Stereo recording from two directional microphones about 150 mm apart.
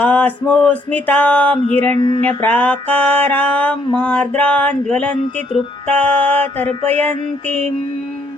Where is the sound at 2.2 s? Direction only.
10° left (ahead or behind).